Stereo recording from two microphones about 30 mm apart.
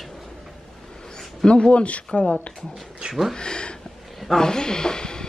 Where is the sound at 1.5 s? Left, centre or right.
Left.